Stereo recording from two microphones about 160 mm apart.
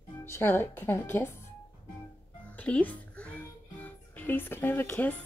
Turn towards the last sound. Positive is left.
turn(degrees=15)  # may be behind; listen again after turning